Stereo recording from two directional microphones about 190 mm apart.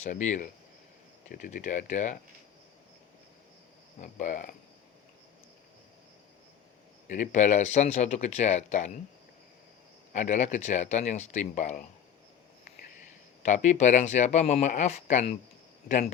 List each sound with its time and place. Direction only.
0.0 s speech: 40° left (ahead or behind)
4.0 s cricket: 45° left (ahead or behind)
7.1 s speech: 40° left (ahead or behind)
10.1 s speech: 40° left (ahead or behind)
13.4 s speech: 40° left (ahead or behind)